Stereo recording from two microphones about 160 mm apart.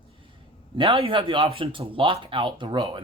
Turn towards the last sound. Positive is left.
turn(degrees=-30)  # may be behind; listen again after turning